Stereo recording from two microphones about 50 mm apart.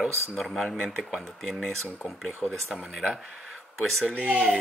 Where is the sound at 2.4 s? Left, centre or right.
Left.